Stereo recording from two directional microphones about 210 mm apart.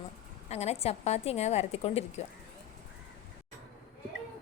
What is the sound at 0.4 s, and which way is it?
A woman's voice, 30° left (ahead or behind).